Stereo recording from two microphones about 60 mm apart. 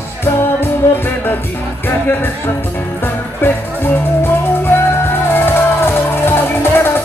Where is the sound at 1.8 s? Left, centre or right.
Left.